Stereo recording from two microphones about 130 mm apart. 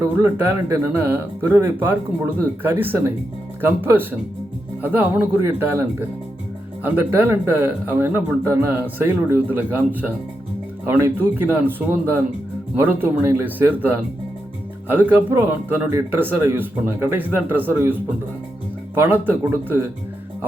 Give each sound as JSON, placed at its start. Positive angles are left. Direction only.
{"t": 0.0, "sound": "speech", "side_deg": -20}
{"t": 6.8, "sound": "speech", "side_deg": -15}
{"t": 18.9, "sound": "speech", "side_deg": -15}